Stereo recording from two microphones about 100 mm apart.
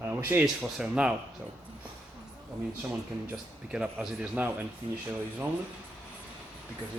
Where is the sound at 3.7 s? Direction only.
10° right (ahead or behind).